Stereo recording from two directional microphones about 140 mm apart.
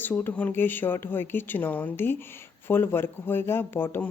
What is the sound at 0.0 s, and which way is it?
Speech, 15° left (ahead or behind).